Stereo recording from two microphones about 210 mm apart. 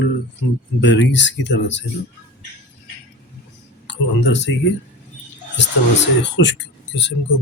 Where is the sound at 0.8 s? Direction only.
60° left (ahead or behind).